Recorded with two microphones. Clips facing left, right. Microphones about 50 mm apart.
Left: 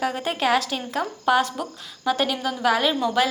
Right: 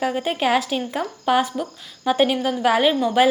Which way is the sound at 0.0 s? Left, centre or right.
Centre.